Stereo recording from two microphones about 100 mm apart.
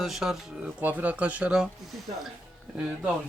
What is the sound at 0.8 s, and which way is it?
Speech, 15° right (ahead or behind).